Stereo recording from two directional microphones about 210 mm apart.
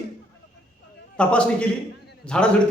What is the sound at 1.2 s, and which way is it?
A man's voice, 5° left (ahead or behind).